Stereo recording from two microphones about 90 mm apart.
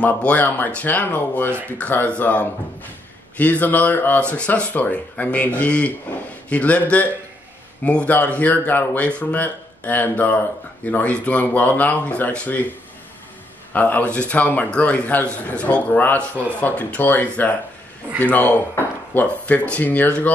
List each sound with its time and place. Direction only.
0.0 s speech: 15° left (ahead or behind)
13.7 s speech: 15° left (ahead or behind)